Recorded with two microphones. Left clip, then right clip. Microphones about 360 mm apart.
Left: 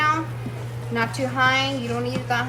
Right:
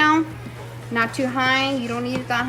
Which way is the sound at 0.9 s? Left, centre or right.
Right.